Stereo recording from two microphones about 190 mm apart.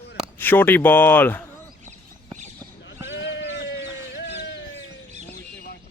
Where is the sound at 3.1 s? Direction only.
70° left (ahead or behind).